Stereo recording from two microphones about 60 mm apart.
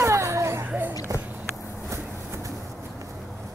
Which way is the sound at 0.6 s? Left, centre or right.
Right.